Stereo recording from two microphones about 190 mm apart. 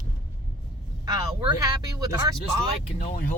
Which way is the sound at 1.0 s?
20° right (ahead or behind).